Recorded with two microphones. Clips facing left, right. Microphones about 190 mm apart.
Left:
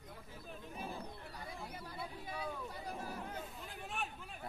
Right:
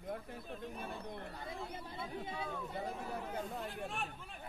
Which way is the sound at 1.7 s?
25° right (ahead or behind).